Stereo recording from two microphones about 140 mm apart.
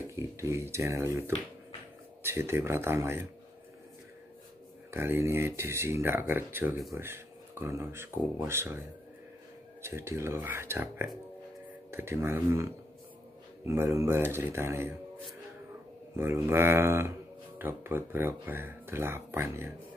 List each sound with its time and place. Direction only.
0.1 s speech: 20° right (ahead or behind)
4.9 s speech: 15° right (ahead or behind)
16.2 s speech: 15° right (ahead or behind)